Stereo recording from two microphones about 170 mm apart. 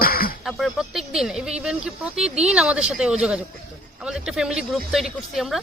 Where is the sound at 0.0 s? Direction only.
60° left (ahead or behind).